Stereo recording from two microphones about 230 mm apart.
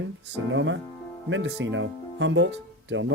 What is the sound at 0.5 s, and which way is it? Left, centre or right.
Speech, right.